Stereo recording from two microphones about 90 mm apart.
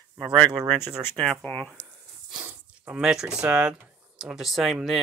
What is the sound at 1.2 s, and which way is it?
Speech, 5° left (ahead or behind).